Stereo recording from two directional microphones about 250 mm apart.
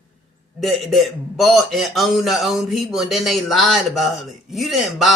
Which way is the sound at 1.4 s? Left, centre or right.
Centre.